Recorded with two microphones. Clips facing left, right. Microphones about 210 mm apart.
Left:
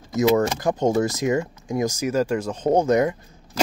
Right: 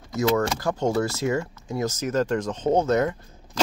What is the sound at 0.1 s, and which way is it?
Speech, 20° left (ahead or behind).